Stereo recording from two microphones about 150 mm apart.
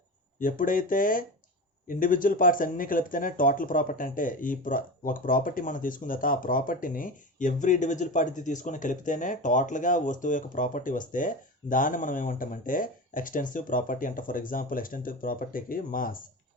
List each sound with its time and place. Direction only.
0.3 s speech: 65° left (ahead or behind)